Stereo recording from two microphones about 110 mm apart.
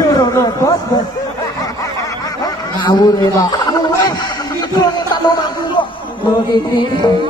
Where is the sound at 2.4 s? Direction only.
40° left (ahead or behind).